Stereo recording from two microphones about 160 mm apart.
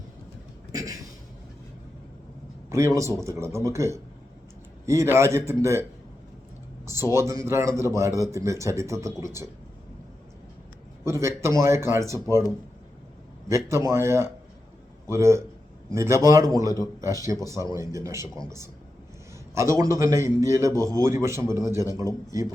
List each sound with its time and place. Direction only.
0.7 s a sound: 20° right (ahead or behind)
2.6 s a man's voice: 20° right (ahead or behind)
6.8 s a man's voice: 15° right (ahead or behind)
11.0 s a man's voice: 15° right (ahead or behind)
13.7 s a man's voice: 15° right (ahead or behind)